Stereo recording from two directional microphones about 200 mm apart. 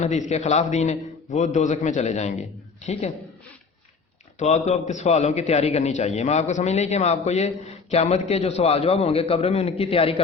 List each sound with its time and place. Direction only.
0.0 s a man's voice: 35° left (ahead or behind)
4.4 s a man's voice: 35° left (ahead or behind)